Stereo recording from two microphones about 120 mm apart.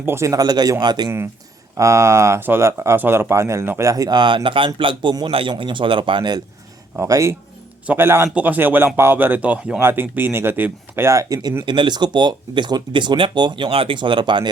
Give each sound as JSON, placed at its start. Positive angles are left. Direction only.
{"t": 0.0, "sound": "speech", "side_deg": -20}
{"t": 1.7, "sound": "speech", "side_deg": -25}
{"t": 6.9, "sound": "speech", "side_deg": -25}
{"t": 11.6, "sound": "speech", "side_deg": -40}